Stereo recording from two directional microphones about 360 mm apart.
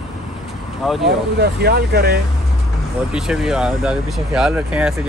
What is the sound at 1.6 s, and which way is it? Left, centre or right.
Speech, right.